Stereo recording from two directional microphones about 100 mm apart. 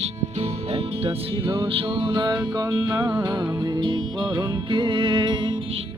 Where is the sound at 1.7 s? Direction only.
55° right (ahead or behind).